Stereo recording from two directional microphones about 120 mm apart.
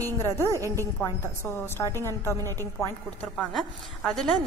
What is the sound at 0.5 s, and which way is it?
Speech, 25° right (ahead or behind).